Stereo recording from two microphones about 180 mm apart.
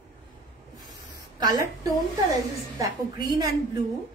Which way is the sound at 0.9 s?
20° right (ahead or behind).